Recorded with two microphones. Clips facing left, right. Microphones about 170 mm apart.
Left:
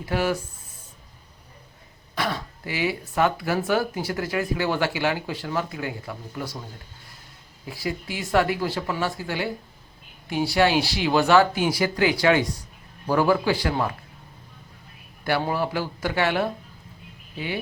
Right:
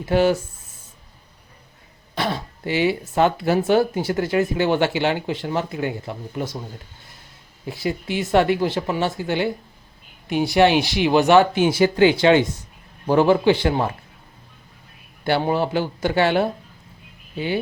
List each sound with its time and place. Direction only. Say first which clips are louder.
0.0 s speech: right 7 dB; 25° right (ahead or behind)
2.1 s speech: right 3 dB; 25° right (ahead or behind)
7.7 s speech: right 5 dB; 25° right (ahead or behind)
15.2 s speech: right 4 dB; 25° right (ahead or behind)